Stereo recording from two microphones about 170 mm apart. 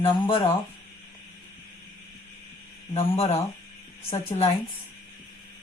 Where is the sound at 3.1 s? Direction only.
35° left (ahead or behind).